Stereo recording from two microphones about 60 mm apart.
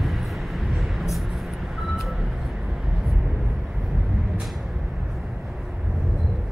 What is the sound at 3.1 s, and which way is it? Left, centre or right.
Vehicle, centre.